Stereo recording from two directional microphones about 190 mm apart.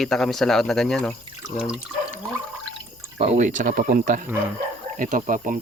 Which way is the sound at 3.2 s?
35° right (ahead or behind).